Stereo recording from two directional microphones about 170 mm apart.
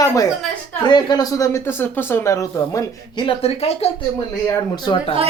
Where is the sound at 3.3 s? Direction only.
35° left (ahead or behind).